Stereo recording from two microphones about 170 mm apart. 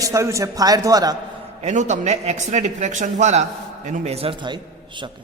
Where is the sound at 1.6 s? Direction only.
45° right (ahead or behind).